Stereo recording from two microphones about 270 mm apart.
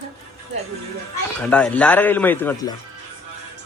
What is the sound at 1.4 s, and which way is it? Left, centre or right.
A man's voice, centre.